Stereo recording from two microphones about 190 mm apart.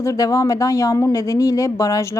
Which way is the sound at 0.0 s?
15° left (ahead or behind).